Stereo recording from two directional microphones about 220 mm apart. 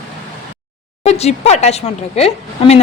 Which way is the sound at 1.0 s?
30° left (ahead or behind).